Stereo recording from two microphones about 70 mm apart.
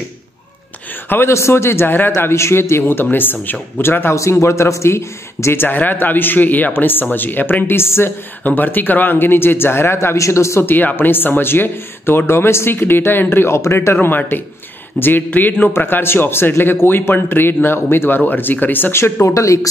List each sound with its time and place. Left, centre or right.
1.0 s speech: left
4.1 s speech: left
8.5 s speech: left
10.1 s speech: left
10.6 s speech: left
14.0 s speech: left
19.2 s speech: left